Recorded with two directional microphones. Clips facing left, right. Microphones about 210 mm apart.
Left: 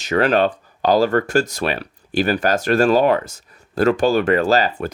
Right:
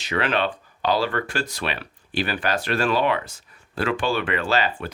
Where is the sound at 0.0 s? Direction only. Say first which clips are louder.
Left 7 dB; 45° left (ahead or behind).